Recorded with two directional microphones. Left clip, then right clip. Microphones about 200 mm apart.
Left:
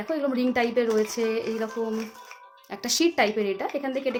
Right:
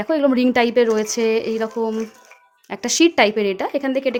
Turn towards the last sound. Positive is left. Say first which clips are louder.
# right 7 dB
turn(degrees=-55)  # may be behind; listen again after turning